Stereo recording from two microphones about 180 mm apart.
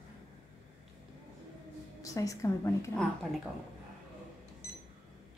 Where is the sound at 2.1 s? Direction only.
15° left (ahead or behind).